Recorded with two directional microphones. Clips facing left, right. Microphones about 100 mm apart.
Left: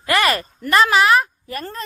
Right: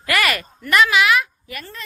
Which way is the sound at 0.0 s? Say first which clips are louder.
Left 3 dB; 30° left (ahead or behind).